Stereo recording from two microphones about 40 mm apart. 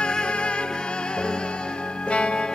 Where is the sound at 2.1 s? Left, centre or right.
Left.